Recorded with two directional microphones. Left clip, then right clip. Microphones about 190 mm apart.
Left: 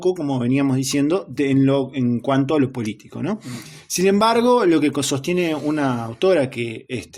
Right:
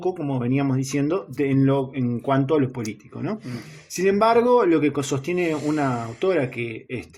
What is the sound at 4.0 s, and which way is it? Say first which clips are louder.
Speech: left 1 dB; 40° left (ahead or behind).